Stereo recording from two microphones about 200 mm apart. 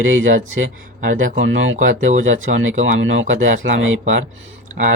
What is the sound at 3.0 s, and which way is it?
Speech, 75° right (ahead or behind).